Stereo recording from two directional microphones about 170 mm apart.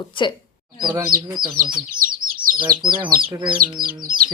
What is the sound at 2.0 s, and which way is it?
Bird, 55° right (ahead or behind).